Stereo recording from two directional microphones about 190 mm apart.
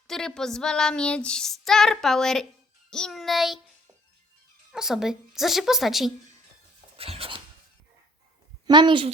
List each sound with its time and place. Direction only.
0.1 s female singing: 5° left (ahead or behind)
4.7 s female singing: centre (ahead or behind)
6.9 s writing: 30° right (ahead or behind)
8.6 s speech: 25° right (ahead or behind)